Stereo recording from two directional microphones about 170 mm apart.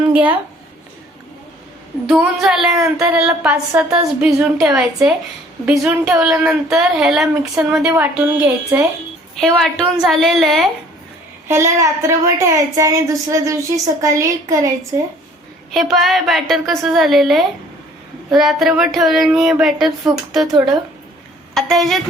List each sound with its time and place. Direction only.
0.1 s speech: 10° right (ahead or behind)
2.0 s a woman's voice: 5° right (ahead or behind)
9.4 s speech: centre (ahead or behind)
11.4 s a woman's voice: 15° right (ahead or behind)
15.7 s speech: centre (ahead or behind)